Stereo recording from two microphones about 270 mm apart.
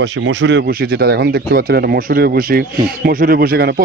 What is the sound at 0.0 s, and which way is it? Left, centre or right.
Speech, right.